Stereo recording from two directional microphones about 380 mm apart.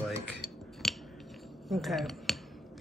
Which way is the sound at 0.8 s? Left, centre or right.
Centre.